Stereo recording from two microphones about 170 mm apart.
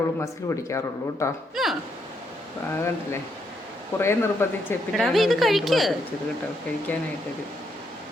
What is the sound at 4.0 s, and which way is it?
Speech, 15° left (ahead or behind).